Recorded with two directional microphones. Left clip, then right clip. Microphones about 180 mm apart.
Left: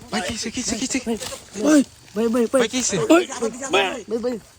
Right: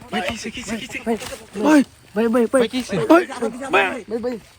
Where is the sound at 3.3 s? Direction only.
60° right (ahead or behind).